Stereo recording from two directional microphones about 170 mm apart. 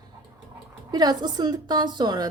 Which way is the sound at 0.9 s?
25° right (ahead or behind).